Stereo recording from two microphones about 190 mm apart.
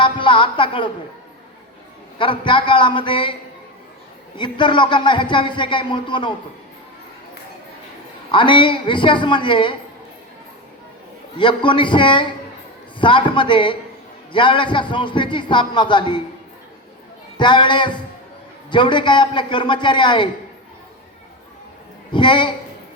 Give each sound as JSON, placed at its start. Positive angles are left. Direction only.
{"t": 0.0, "sound": "a woman's voice", "side_deg": 25}
{"t": 2.1, "sound": "speech", "side_deg": 25}
{"t": 4.4, "sound": "speech", "side_deg": 25}
{"t": 8.3, "sound": "speech", "side_deg": 25}
{"t": 11.3, "sound": "speech", "side_deg": 25}
{"t": 17.3, "sound": "speech", "side_deg": 25}
{"t": 22.1, "sound": "speech", "side_deg": 25}